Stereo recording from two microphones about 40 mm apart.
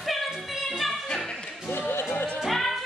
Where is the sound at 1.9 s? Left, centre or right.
Left.